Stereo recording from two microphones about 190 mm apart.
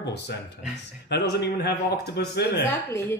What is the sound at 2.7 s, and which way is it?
Speech, 10° left (ahead or behind).